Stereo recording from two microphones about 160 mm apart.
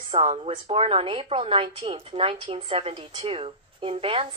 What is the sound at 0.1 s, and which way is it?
A woman's voice, 35° right (ahead or behind).